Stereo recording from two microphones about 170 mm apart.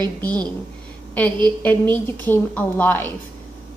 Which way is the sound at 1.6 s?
10° left (ahead or behind).